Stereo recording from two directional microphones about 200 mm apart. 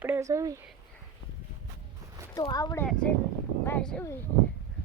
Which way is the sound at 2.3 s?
20° left (ahead or behind).